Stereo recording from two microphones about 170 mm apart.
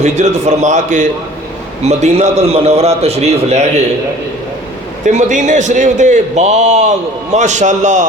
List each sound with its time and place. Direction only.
0.0 s a man's voice: 45° right (ahead or behind)
5.0 s a man's voice: 45° right (ahead or behind)